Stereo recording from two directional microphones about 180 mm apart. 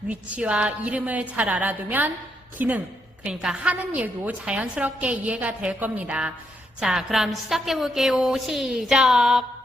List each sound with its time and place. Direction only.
0.1 s a woman's voice: 5° right (ahead or behind)